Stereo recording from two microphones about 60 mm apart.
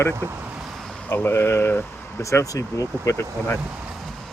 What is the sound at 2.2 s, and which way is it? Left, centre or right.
Speech, left.